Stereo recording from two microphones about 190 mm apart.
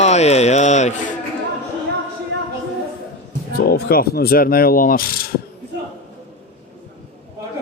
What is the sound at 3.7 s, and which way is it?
Speech, 55° left (ahead or behind).